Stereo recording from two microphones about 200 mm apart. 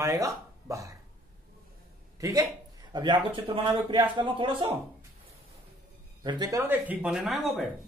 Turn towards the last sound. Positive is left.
turn(degrees=0)  # may be behind; listen again after turning